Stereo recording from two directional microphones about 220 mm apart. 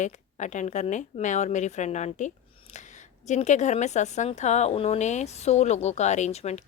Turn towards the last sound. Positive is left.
turn(degrees=30)  # may be behind; listen again after turning